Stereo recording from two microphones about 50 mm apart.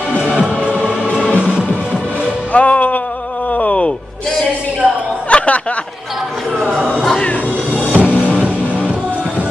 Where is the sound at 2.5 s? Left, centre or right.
Left.